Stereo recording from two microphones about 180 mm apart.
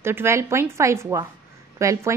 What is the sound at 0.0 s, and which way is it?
A woman's voice, 15° right (ahead or behind).